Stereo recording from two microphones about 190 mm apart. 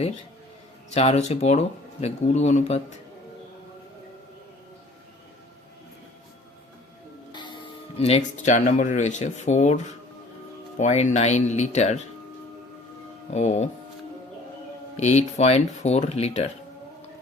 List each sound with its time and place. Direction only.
0.9 s speech: 35° left (ahead or behind)
7.3 s speech: 25° left (ahead or behind)
13.3 s speech: 40° left (ahead or behind)
14.9 s speech: 35° left (ahead or behind)